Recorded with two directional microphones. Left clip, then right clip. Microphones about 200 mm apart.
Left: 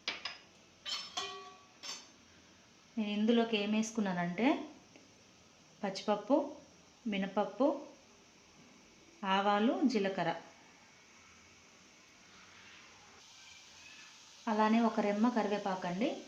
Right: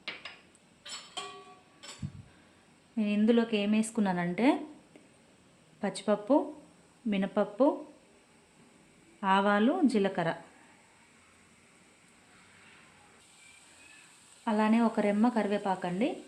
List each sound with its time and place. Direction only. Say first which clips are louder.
3.0 s speech: right 4 dB; 60° right (ahead or behind)
5.8 s speech: right 4 dB; 55° right (ahead or behind)
9.2 s speech: right 5 dB; 60° right (ahead or behind)
14.4 s speech: right 3 dB; 55° right (ahead or behind)